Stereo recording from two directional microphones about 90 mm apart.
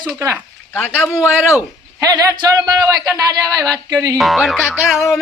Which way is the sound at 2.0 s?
45° right (ahead or behind).